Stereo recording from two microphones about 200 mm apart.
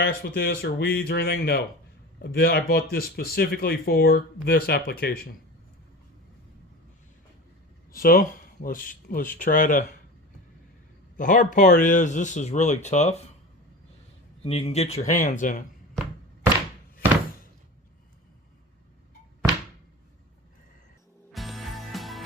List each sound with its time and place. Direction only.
0.0 s speech: 50° left (ahead or behind)
7.9 s speech: 45° left (ahead or behind)
11.2 s speech: 40° left (ahead or behind)
14.4 s speech: 30° left (ahead or behind)
21.3 s music: centre (ahead or behind)